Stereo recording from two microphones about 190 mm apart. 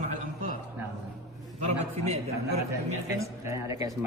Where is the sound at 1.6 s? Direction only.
35° right (ahead or behind).